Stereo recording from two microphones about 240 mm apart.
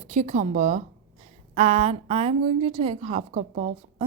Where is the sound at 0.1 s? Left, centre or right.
Right.